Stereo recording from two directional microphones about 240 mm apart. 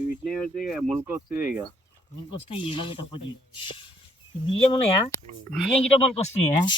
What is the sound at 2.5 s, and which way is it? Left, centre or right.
Speech, left.